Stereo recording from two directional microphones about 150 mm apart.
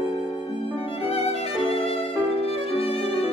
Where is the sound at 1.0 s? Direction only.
40° left (ahead or behind).